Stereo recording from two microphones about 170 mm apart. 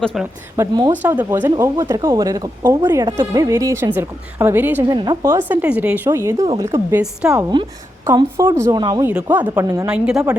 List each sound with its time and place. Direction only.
0.0 s a woman's voice: centre (ahead or behind)
0.5 s speech: 20° right (ahead or behind)
4.8 s speech: 25° right (ahead or behind)
7.0 s a woman's voice: 5° right (ahead or behind)
8.0 s speech: 20° right (ahead or behind)
9.3 s speech: 10° right (ahead or behind)
9.9 s a woman's voice: 5° right (ahead or behind)